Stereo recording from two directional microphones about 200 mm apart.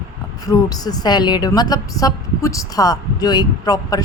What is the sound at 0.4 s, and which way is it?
A woman's voice, 20° left (ahead or behind).